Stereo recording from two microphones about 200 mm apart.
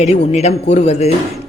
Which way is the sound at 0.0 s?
35° left (ahead or behind).